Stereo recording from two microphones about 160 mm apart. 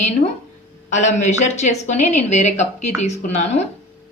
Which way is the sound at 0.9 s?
50° left (ahead or behind).